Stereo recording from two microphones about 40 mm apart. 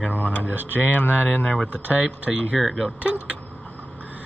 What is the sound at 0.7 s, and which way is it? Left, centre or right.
Speech, left.